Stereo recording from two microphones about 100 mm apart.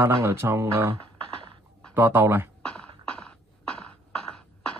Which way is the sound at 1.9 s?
25° right (ahead or behind).